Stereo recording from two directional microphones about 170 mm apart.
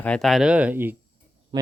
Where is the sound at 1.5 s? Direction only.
30° right (ahead or behind).